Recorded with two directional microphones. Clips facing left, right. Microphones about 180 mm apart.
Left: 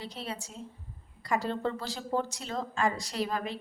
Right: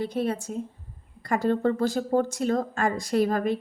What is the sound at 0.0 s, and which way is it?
Speech, 55° right (ahead or behind).